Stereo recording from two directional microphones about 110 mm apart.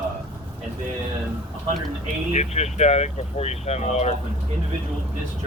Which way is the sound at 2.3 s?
90° left.